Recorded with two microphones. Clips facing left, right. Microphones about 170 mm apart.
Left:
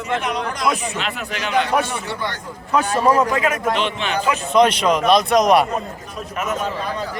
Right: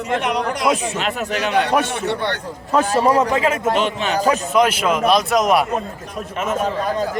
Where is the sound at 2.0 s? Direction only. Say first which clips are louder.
Right 5 dB; 65° right (ahead or behind).